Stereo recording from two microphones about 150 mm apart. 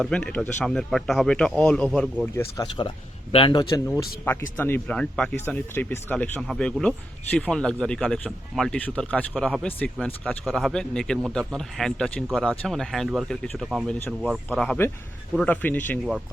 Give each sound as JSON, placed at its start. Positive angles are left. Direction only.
{"t": 0.0, "sound": "speech", "side_deg": 5}
{"t": 2.2, "sound": "speech", "side_deg": 15}
{"t": 3.3, "sound": "speech", "side_deg": 30}
{"t": 3.8, "sound": "speech", "side_deg": 15}